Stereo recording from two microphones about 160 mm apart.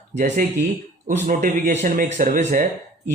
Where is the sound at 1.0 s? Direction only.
50° right (ahead or behind).